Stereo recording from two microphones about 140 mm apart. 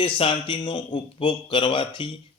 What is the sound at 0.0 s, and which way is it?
Speech, 40° left (ahead or behind).